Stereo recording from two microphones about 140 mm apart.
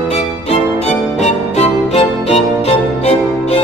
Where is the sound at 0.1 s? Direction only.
50° left (ahead or behind).